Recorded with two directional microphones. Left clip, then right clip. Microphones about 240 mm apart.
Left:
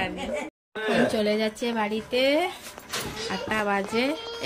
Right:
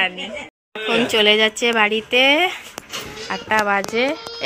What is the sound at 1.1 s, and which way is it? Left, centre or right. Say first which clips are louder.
Speech: right 11 dB; right.